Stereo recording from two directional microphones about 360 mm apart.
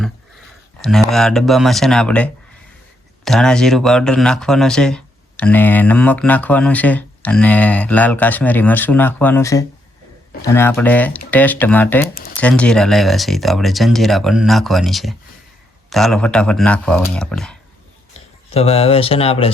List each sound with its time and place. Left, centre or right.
0.8 s speech: centre
18.5 s speech: centre